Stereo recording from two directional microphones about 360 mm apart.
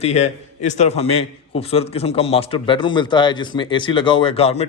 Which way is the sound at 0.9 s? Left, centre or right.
Left.